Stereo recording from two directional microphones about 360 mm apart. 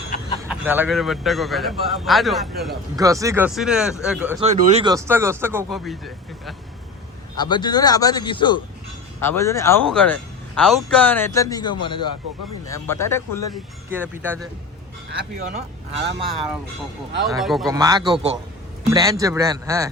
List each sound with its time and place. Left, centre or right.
0.4 s a man's voice: centre
4.4 s speech: centre
7.3 s a man's voice: centre
13.9 s a man's voice: centre
15.1 s speech: right
17.2 s a man's voice: centre